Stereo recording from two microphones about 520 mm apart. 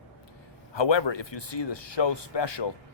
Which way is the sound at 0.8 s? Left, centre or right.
Left.